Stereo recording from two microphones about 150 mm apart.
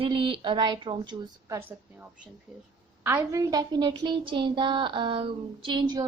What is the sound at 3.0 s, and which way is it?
A woman's voice, 15° right (ahead or behind).